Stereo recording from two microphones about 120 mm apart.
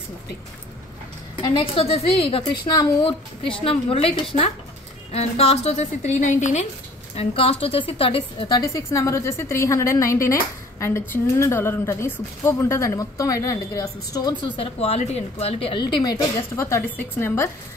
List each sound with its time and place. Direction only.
1.4 s a woman's voice: 45° left (ahead or behind); by 6.7 s 80° left
7.2 s a woman's voice: 55° left (ahead or behind)
8.5 s a woman's voice: 30° left (ahead or behind)
14.6 s a woman's voice: 55° left (ahead or behind); by 16.2 s 35° left (ahead or behind)
16.5 s a woman's voice: 20° left (ahead or behind)